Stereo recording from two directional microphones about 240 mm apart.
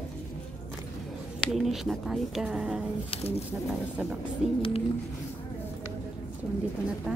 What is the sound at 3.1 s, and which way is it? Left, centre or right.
Speech, left.